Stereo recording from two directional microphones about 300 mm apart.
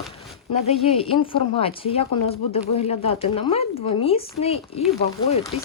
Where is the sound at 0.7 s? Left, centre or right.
Centre.